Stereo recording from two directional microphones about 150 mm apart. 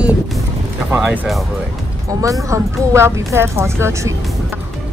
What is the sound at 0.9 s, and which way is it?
Speech, 10° right (ahead or behind).